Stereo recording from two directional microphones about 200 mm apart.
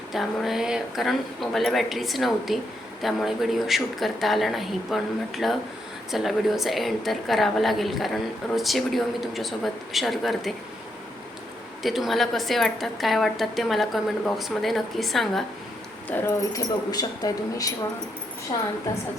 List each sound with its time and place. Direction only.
0.1 s a woman's voice: centre (ahead or behind)
11.8 s a woman's voice: centre (ahead or behind)
16.0 s a woman's voice: 15° left (ahead or behind)